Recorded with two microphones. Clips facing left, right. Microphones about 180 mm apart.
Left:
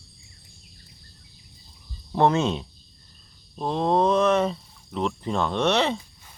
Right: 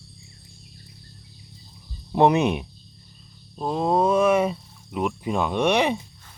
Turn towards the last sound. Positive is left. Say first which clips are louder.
# right 2 dB
turn(degrees=-15)  # may be behind; listen again after turning